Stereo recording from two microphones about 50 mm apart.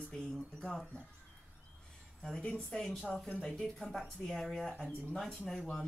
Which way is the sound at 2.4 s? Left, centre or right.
Left.